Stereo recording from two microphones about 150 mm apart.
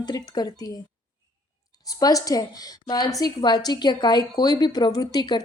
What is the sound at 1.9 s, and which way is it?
A woman's voice, 25° left (ahead or behind).